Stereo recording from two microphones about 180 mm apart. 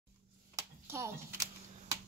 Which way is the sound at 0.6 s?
15° right (ahead or behind).